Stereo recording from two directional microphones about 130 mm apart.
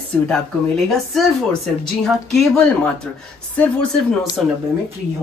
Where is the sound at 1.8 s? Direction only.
5° left (ahead or behind).